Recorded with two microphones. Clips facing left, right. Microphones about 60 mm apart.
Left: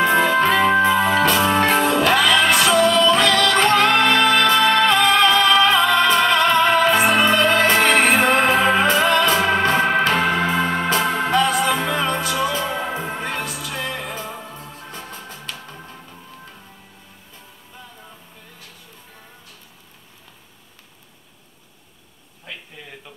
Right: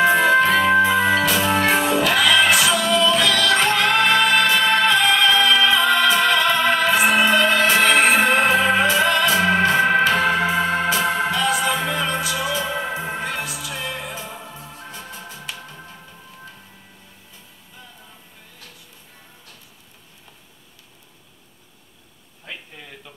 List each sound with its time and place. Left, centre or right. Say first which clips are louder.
0.5 s organ: even; centre
1.2 s music: left 2 dB; left
9.6 s organ: right 1 dB; left
10.0 s music: even; left